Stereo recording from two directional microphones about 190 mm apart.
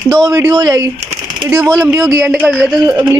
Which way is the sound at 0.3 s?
20° right (ahead or behind).